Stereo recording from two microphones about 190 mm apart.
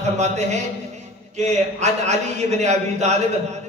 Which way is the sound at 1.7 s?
35° right (ahead or behind).